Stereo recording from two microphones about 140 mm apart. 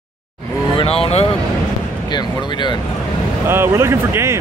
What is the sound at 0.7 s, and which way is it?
Speech, 45° left (ahead or behind).